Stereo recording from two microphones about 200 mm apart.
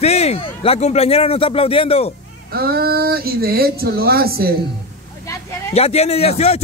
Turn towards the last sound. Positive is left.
turn(degrees=30)  # may be behind; listen again after turning